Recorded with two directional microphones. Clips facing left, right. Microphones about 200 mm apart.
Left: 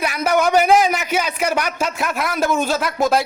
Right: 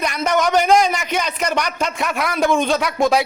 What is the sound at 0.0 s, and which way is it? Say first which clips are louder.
A man's voice: left 1 dB; 5° left (ahead or behind).